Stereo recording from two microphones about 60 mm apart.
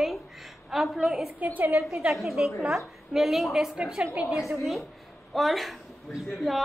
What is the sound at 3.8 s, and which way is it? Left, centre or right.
A woman's voice, centre.